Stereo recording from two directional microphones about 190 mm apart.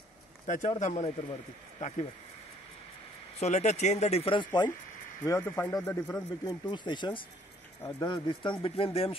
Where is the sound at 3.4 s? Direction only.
35° left (ahead or behind).